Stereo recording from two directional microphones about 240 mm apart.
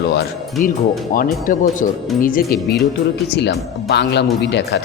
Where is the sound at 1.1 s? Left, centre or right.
Left.